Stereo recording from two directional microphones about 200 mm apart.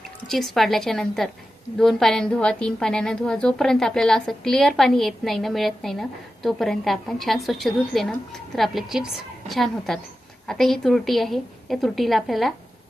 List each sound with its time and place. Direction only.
0.3 s a woman's voice: centre (ahead or behind)